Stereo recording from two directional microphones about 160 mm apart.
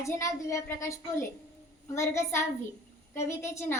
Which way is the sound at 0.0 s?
20° left (ahead or behind).